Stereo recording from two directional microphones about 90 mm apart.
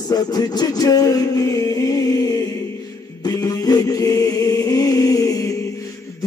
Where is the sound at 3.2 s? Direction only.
45° left (ahead or behind).